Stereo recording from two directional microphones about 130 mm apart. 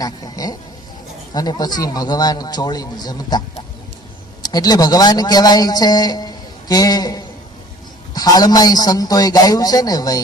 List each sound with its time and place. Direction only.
0.0 s a sound: 30° left (ahead or behind)
1.3 s speech: 30° left (ahead or behind)
4.4 s a man's voice: 30° left (ahead or behind)